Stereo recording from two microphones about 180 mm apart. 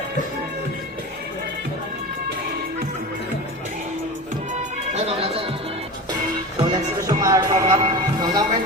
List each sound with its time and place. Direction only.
4.9 s music: 35° right (ahead or behind)
6.7 s music: 20° right (ahead or behind)